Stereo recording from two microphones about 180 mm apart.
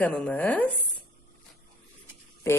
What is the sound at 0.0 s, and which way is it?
Speech, 5° left (ahead or behind).